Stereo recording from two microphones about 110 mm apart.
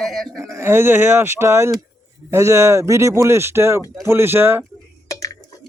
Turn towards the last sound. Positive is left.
turn(degrees=30)  # may be behind; listen again after turning